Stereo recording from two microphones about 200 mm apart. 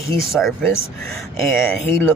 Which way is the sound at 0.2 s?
Centre (ahead or behind).